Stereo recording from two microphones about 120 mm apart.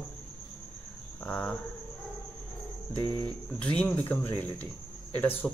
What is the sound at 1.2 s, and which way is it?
Cricket, 10° left (ahead or behind).